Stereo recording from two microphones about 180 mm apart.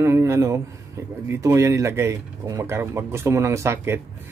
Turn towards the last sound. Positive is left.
turn(degrees=-15)  # may be behind; listen again after turning